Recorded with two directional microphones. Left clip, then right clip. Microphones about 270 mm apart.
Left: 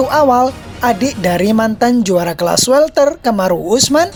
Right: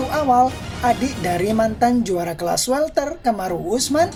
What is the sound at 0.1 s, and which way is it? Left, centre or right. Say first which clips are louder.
Speech: left 6 dB; left.